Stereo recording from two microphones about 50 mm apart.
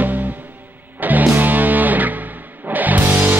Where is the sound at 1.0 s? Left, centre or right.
Right.